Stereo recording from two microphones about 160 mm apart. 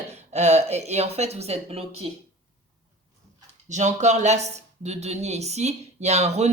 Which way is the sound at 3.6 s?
50° right (ahead or behind).